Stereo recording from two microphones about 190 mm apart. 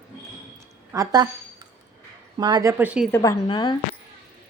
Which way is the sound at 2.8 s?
5° right (ahead or behind).